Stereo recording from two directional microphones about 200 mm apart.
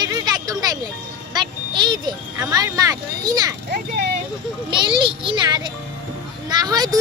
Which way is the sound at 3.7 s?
50° right (ahead or behind).